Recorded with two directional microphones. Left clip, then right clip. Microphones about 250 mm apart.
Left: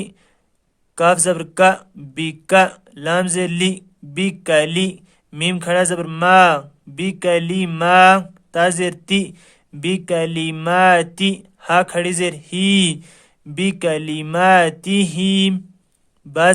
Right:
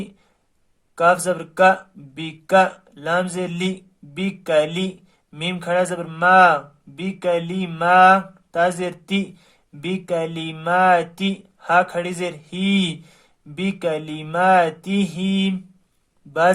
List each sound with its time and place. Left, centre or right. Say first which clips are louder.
0.9 s speech: left 2 dB; left